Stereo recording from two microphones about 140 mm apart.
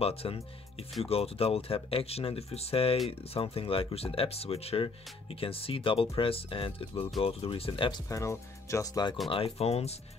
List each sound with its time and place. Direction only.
0.0 s speech: 45° left (ahead or behind)
8.1 s speech: 20° left (ahead or behind)
9.3 s speech: 45° left (ahead or behind)